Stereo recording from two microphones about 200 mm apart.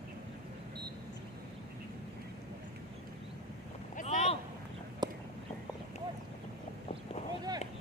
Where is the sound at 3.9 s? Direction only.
35° left (ahead or behind).